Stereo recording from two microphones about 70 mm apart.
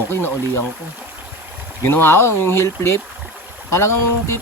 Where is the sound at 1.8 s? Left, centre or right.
Left.